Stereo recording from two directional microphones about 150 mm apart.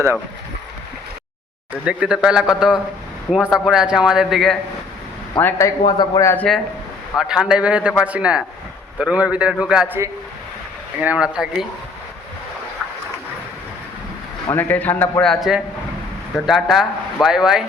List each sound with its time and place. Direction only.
1.7 s a man's voice: 10° right (ahead or behind)
5.4 s speech: 15° left (ahead or behind)
6.3 s a man's voice: 10° left (ahead or behind)
7.2 s a man's voice: 5° right (ahead or behind)
14.5 s a man's voice: 10° left (ahead or behind); by 17.7 s 5° right (ahead or behind)